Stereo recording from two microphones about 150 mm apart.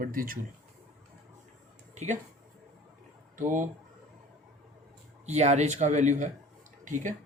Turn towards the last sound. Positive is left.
turn(degrees=-60)  # may be behind; listen again after turning